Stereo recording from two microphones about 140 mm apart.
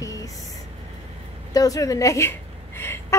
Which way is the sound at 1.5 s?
25° left (ahead or behind).